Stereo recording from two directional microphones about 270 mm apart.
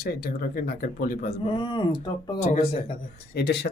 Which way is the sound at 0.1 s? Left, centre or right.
Left.